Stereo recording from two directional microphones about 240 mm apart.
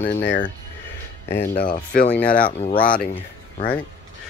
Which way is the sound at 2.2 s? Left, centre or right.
Left.